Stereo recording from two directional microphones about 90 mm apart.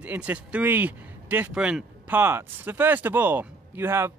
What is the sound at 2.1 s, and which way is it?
Speech, 25° right (ahead or behind).